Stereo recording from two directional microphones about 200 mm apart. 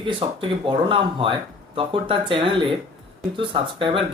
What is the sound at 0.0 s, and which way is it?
Speech, 25° right (ahead or behind).